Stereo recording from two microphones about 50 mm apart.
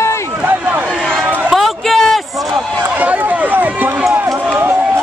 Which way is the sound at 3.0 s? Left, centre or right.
Right.